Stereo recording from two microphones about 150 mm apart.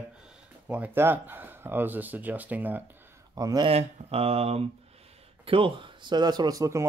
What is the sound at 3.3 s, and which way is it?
Speech, 25° right (ahead or behind).